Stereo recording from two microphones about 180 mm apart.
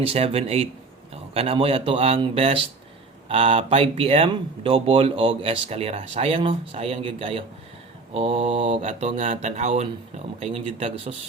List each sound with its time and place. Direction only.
0.0 s speech: 35° right (ahead or behind)